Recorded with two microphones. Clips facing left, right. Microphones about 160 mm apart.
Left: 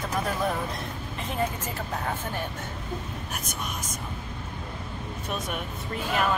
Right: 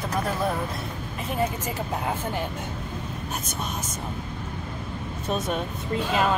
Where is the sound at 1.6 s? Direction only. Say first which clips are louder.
Right 3 dB; 15° right (ahead or behind).